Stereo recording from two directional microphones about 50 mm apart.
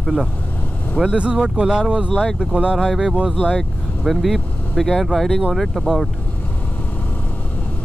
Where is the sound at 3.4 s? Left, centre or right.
Centre.